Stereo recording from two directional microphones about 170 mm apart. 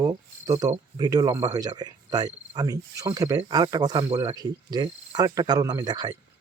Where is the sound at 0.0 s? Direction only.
20° right (ahead or behind).